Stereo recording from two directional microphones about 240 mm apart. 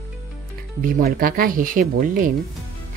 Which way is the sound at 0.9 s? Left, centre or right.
Right.